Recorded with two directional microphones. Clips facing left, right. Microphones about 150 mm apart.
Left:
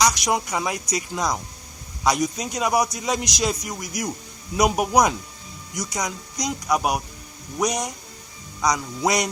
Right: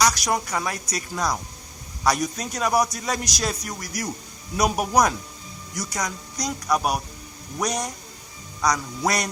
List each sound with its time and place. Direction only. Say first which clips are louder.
0.0 s a man's voice: left 1 dB; 15° left (ahead or behind)